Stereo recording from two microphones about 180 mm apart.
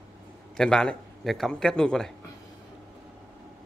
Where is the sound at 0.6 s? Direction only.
5° left (ahead or behind).